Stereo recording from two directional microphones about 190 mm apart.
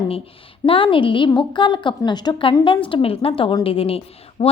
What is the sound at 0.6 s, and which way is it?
A woman's voice, 25° left (ahead or behind).